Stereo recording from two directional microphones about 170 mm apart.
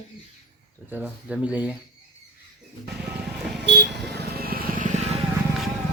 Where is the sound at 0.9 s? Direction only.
10° right (ahead or behind).